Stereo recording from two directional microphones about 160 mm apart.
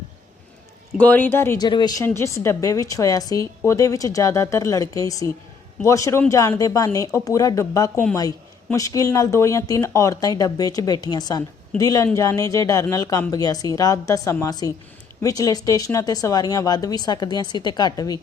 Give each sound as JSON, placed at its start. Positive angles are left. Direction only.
{"t": 0.9, "sound": "speech", "side_deg": 10}
{"t": 1.6, "sound": "speech", "side_deg": 25}